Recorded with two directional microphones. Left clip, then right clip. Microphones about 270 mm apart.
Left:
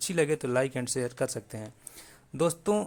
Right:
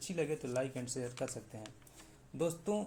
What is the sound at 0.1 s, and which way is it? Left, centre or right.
A man's voice, left.